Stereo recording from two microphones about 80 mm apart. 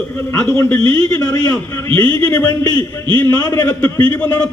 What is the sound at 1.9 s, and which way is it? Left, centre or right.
A man's voice, left.